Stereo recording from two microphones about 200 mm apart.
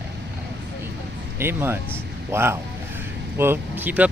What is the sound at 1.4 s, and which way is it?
Speech, 10° right (ahead or behind).